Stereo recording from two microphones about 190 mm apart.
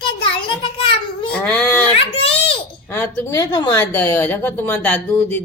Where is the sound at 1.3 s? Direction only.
5° left (ahead or behind).